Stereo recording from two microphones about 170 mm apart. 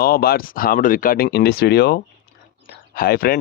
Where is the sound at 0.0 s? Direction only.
65° left (ahead or behind).